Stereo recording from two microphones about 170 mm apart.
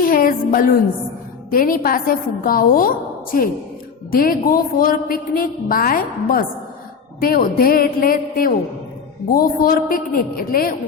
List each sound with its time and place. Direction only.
0.0 s music: 55° left (ahead or behind)
1.5 s a woman's voice: 55° left (ahead or behind)
4.1 s a woman's voice: 55° left (ahead or behind)